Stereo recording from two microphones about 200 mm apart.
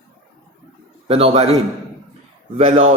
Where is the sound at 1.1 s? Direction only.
30° right (ahead or behind).